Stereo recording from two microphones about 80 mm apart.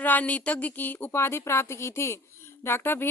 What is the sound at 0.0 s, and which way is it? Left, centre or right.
Speech, centre.